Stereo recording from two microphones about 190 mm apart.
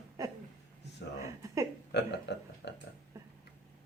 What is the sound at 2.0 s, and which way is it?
Speech, 65° left (ahead or behind).